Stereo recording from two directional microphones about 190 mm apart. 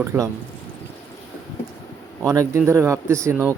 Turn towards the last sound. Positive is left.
turn(degrees=-15)  # may be behind; listen again after turning